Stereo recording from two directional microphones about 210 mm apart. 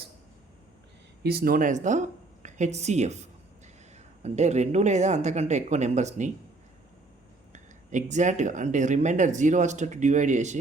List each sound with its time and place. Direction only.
1.2 s speech: 50° right (ahead or behind)
7.5 s speech: 35° right (ahead or behind)